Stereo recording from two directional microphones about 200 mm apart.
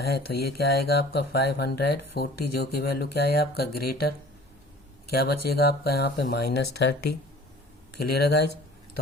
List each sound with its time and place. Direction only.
0.0 s speech: 50° left (ahead or behind)
5.1 s speech: 50° left (ahead or behind)
8.1 s speech: 55° left (ahead or behind)